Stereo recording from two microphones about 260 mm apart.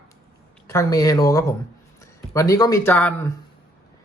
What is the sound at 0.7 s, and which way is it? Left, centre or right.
A man's voice, centre.